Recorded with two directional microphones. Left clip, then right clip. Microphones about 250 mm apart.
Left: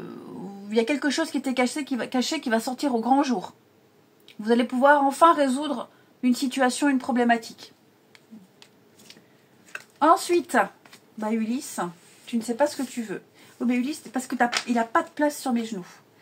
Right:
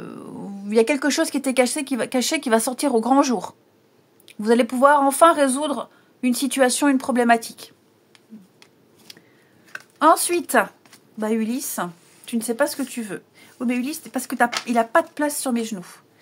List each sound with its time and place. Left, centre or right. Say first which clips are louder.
0.7 s speech: right 5 dB; right
9.9 s a woman's voice: right 3 dB; right